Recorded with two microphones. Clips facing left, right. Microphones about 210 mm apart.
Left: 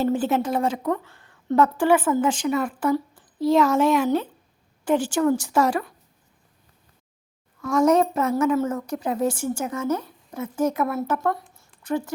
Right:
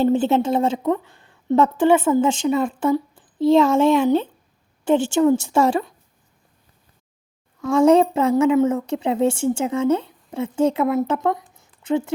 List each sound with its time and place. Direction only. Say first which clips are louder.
0.0 s a woman's voice: right 4 dB; 25° right (ahead or behind)
7.6 s a woman's voice: right 4 dB; 25° right (ahead or behind)